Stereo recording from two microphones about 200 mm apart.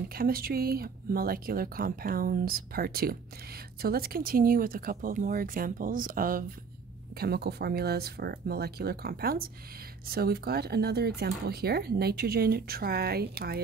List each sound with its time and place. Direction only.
0.1 s speech: 45° right (ahead or behind)